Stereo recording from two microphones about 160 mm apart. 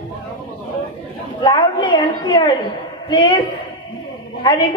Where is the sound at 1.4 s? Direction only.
30° left (ahead or behind).